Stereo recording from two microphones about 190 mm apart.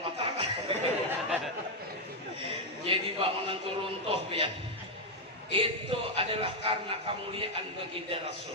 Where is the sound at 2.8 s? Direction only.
30° right (ahead or behind).